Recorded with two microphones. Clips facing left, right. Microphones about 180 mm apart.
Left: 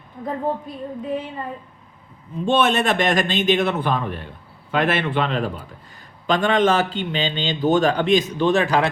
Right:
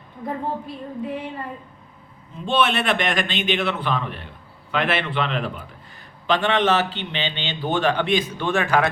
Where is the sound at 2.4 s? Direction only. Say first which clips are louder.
Left 2 dB; 45° left (ahead or behind).